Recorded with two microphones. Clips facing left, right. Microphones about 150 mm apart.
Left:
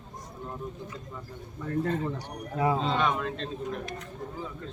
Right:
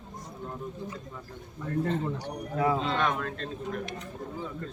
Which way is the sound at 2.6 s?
30° left (ahead or behind).